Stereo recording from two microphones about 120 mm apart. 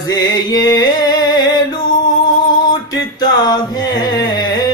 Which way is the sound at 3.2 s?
35° left (ahead or behind).